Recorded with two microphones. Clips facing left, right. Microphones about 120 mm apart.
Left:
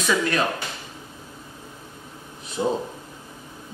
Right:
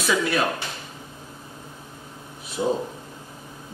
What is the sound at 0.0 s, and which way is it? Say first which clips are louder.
Speech: even; 10° right (ahead or behind).